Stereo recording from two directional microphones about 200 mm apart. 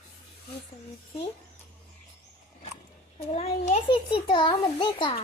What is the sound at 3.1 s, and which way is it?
A child's voice, 35° left (ahead or behind).